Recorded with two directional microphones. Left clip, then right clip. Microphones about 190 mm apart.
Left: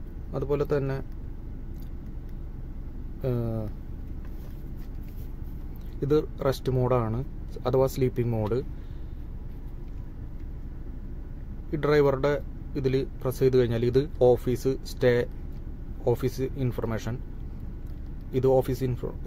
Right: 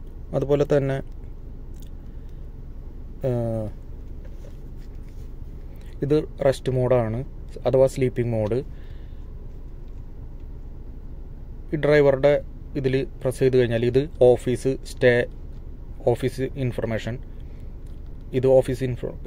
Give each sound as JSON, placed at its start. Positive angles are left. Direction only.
{"t": 0.3, "sound": "a man's voice", "side_deg": 0}
{"t": 3.2, "sound": "a man's voice", "side_deg": 10}
{"t": 5.9, "sound": "a man's voice", "side_deg": 10}
{"t": 11.7, "sound": "a man's voice", "side_deg": 10}
{"t": 18.3, "sound": "a man's voice", "side_deg": 15}